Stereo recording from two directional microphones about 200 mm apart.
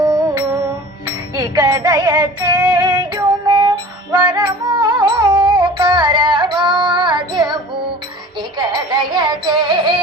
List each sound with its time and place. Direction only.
0.0 s music: 20° right (ahead or behind)